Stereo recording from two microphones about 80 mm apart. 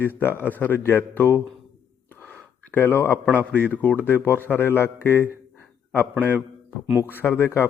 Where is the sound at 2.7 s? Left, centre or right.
Left.